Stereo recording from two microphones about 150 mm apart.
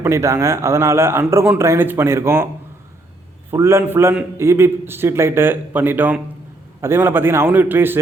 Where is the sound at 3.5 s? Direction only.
15° right (ahead or behind).